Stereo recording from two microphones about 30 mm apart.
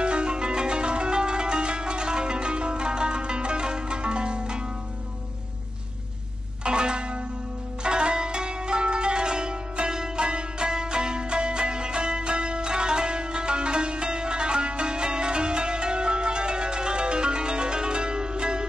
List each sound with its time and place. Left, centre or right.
0.0 s music: right
6.6 s zither: right